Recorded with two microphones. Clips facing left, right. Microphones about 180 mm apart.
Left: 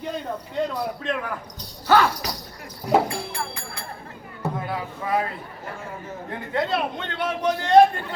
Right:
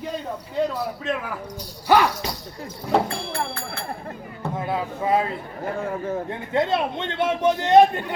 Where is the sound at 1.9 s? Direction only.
15° right (ahead or behind).